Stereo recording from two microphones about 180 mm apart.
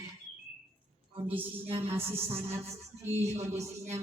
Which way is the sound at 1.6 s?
35° right (ahead or behind).